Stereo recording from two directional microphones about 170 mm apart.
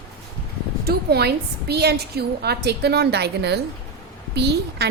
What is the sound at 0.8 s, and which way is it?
A woman's voice, 70° right (ahead or behind).